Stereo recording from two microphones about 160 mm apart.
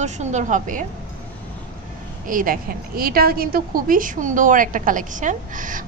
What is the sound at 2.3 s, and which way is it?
A woman's voice, 60° right (ahead or behind).